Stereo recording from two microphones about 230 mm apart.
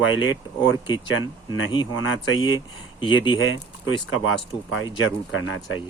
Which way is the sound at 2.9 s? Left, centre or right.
Left.